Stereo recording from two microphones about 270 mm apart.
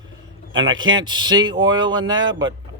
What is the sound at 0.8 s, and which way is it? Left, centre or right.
Speech, right.